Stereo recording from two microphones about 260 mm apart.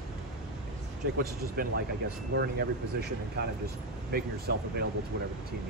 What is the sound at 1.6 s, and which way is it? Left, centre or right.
Speech, right.